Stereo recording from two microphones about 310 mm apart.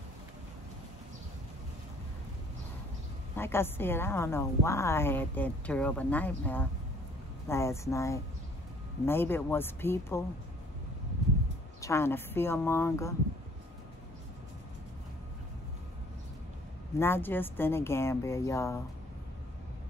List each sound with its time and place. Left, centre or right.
3.3 s a woman's voice: centre
11.8 s a woman's voice: centre
17.0 s a woman's voice: centre